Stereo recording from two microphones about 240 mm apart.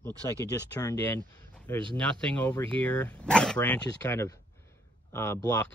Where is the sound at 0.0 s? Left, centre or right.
Centre.